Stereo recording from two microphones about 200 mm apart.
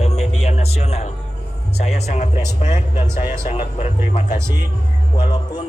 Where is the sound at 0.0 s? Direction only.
30° left (ahead or behind).